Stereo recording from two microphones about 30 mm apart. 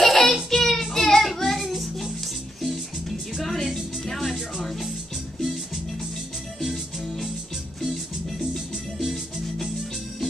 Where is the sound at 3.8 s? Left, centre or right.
Centre.